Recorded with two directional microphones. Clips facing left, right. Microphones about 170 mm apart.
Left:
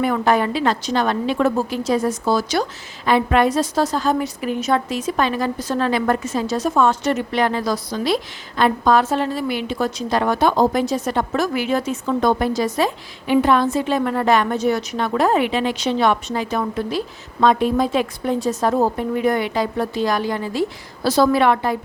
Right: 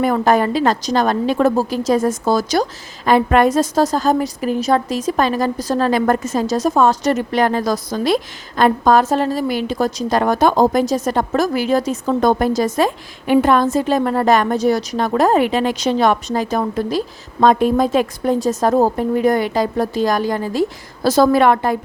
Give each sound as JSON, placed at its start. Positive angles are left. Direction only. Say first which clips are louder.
{"t": 0.0, "sound": "a woman's voice", "louder": "right 3 dB", "side_deg": -40}